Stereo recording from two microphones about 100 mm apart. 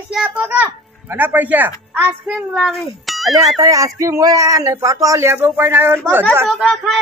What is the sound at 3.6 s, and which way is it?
Speech, 35° right (ahead or behind).